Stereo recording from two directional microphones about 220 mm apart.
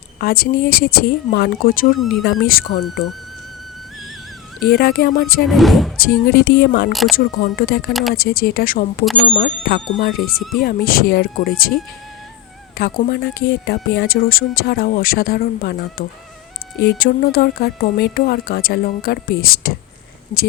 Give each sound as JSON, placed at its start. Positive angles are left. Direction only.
{"t": 0.2, "sound": "speech", "side_deg": 45}
{"t": 2.0, "sound": "speech", "side_deg": 0}
{"t": 2.2, "sound": "speech", "side_deg": 45}
{"t": 4.6, "sound": "speech", "side_deg": 45}
{"t": 5.5, "sound": "speech", "side_deg": 0}
{"t": 6.0, "sound": "speech", "side_deg": 45}
{"t": 6.9, "sound": "speech", "side_deg": 0}
{"t": 7.4, "sound": "speech", "side_deg": 45}